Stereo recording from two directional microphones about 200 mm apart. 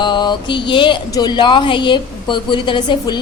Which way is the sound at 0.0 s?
25° left (ahead or behind).